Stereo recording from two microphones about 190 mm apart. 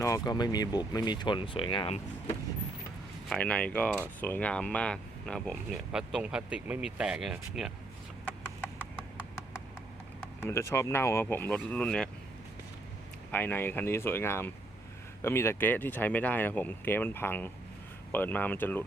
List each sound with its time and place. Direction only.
0.0 s speech: 20° left (ahead or behind)
3.2 s speech: 5° left (ahead or behind)
10.4 s speech: 15° left (ahead or behind)
13.3 s speech: 10° left (ahead or behind)